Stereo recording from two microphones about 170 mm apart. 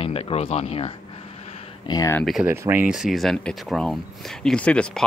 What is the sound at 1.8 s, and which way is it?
Speech, 20° left (ahead or behind).